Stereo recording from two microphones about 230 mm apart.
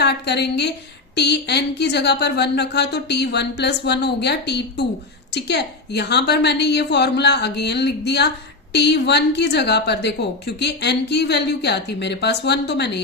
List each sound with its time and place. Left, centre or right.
0.0 s a woman's voice: left